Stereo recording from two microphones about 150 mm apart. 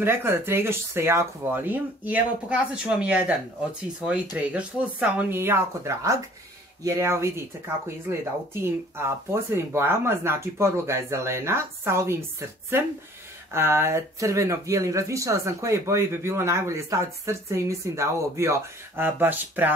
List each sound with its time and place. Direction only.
0.0 s speech: 15° right (ahead or behind)